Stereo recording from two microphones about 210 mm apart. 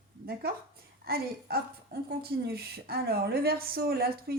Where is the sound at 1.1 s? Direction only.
45° right (ahead or behind).